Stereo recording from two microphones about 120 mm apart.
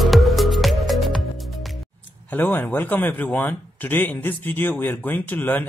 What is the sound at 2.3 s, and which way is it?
Speech, 15° left (ahead or behind).